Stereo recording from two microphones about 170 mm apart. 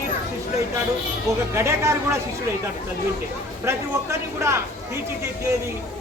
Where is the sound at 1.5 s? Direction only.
15° right (ahead or behind).